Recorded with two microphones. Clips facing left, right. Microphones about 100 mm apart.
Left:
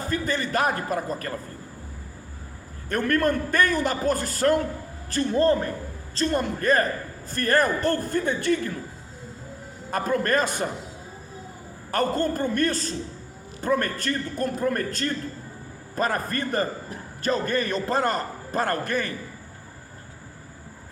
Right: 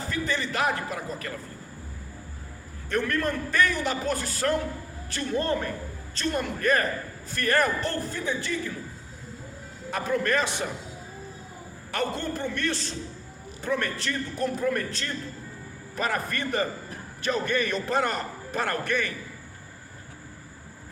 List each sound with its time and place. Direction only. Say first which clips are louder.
0.1 s a man's voice: left 4 dB; 45° left (ahead or behind)
2.9 s a man's voice: left 4 dB; 50° left (ahead or behind)
9.9 s a man's voice: left 3 dB; 45° left (ahead or behind)
11.9 s a man's voice: left 6 dB; 45° left (ahead or behind)